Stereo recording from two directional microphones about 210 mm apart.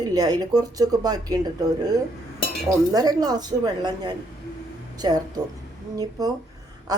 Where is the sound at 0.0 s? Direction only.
20° right (ahead or behind).